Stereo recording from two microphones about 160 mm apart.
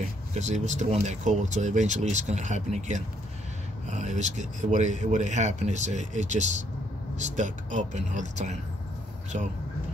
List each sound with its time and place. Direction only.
0.3 s speech: 45° right (ahead or behind)